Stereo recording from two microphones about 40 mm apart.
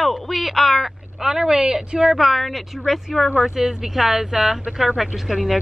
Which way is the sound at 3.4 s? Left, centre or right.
Centre.